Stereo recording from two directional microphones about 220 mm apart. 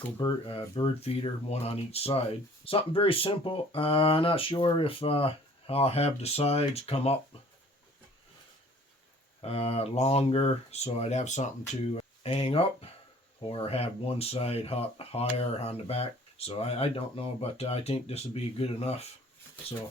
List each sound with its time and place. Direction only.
0.2 s speech: 20° left (ahead or behind)
9.4 s speech: 25° left (ahead or behind)